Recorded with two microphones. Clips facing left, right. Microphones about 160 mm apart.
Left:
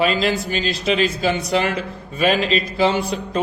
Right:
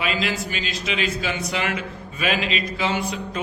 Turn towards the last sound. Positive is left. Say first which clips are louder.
# left 5 dB
turn(degrees=30)  # may be behind; listen again after turning